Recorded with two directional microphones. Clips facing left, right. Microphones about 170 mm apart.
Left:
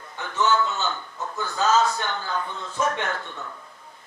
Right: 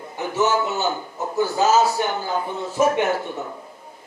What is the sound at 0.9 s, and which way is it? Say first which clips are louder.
Speech: right 5 dB; 35° right (ahead or behind).